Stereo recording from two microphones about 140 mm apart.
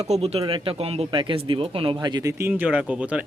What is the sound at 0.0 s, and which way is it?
Speech, 50° right (ahead or behind).